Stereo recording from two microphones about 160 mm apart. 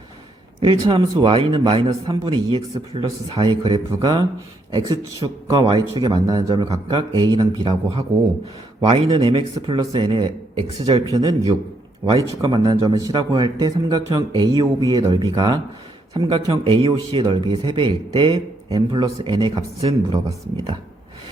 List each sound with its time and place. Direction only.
0.6 s a man's voice: 30° right (ahead or behind)
9.0 s a man's voice: 30° right (ahead or behind)